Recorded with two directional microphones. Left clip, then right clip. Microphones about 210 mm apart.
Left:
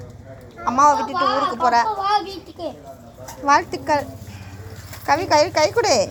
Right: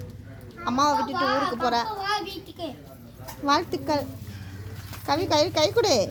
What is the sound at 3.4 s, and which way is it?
Speech, 10° right (ahead or behind).